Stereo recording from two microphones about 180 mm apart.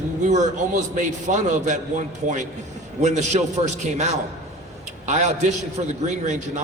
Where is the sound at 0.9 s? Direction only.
45° right (ahead or behind).